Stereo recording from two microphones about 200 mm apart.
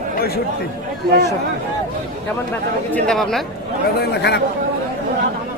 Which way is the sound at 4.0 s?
55° left (ahead or behind).